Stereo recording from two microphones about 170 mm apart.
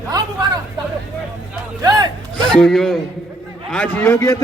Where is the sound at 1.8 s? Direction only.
20° right (ahead or behind).